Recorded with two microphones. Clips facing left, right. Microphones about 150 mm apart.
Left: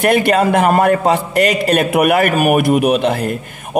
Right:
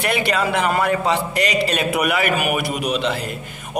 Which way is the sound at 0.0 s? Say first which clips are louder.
Left 8 dB; 50° left (ahead or behind).